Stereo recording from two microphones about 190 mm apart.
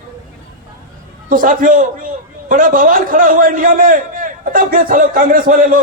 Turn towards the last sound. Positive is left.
turn(degrees=-45)  # may be behind; listen again after turning